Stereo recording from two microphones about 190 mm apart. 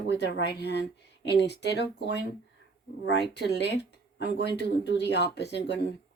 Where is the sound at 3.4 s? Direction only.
65° left (ahead or behind).